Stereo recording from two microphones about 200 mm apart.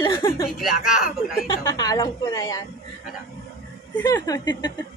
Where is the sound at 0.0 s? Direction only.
15° left (ahead or behind).